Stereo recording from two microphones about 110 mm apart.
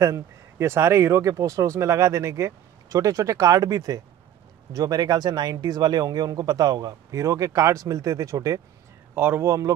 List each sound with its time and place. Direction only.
0.0 s speech: 25° right (ahead or behind)